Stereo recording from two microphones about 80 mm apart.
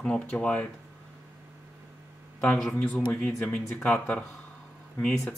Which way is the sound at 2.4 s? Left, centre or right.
Centre.